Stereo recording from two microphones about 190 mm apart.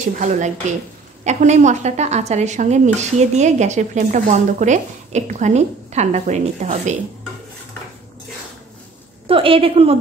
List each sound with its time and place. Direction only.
0.2 s a woman's voice: 40° right (ahead or behind)
9.3 s a woman's voice: 30° right (ahead or behind)